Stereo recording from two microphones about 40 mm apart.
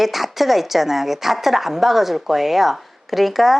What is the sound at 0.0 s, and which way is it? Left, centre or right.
A woman's voice, centre.